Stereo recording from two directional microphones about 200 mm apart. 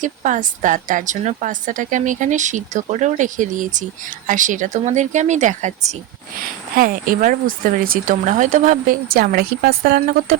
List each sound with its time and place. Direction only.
0.0 s speech: 40° right (ahead or behind)